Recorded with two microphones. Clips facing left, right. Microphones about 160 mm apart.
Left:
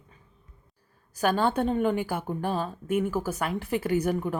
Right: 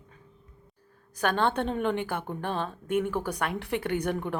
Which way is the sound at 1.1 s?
5° left (ahead or behind).